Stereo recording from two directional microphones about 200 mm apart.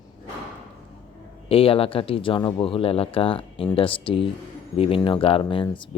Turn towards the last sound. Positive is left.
turn(degrees=25)  # may be behind; listen again after turning